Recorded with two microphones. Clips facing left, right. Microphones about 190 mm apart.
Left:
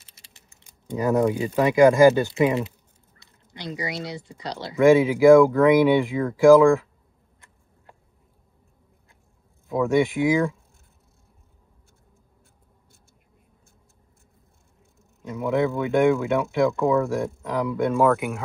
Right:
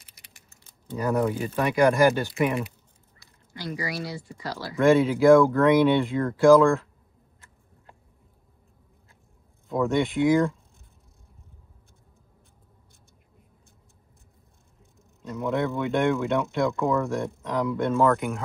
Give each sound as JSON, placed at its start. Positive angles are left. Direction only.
{"t": 0.0, "sound": "typing", "side_deg": 25}
{"t": 0.5, "sound": "speech", "side_deg": 15}
{"t": 6.1, "sound": "speech", "side_deg": 0}
{"t": 9.7, "sound": "speech", "side_deg": 0}
{"t": 15.3, "sound": "speech", "side_deg": 0}